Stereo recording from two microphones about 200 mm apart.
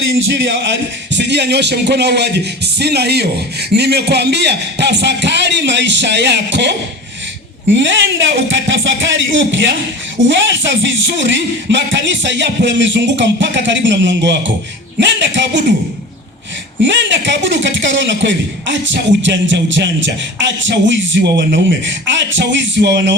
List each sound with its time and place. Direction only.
0.1 s a man's voice: 60° right (ahead or behind)
16.8 s a man's voice: 65° right (ahead or behind)